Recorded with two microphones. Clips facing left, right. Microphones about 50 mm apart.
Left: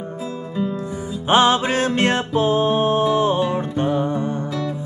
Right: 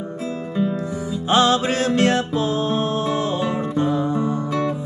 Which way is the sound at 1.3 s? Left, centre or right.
Left.